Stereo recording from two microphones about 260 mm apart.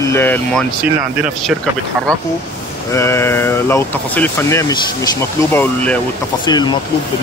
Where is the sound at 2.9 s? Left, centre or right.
Centre.